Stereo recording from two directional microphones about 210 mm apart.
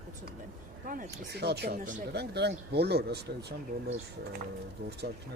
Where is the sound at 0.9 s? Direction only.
45° right (ahead or behind).